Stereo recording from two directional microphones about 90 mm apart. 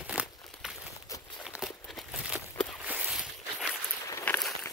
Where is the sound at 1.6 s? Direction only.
Centre (ahead or behind).